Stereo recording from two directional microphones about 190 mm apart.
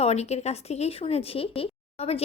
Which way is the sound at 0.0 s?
35° left (ahead or behind).